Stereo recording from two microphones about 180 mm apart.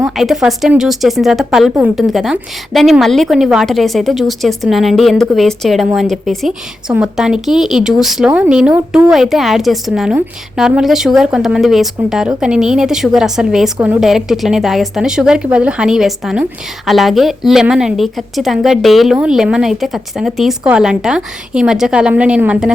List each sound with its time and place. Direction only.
0.0 s a woman's voice: centre (ahead or behind)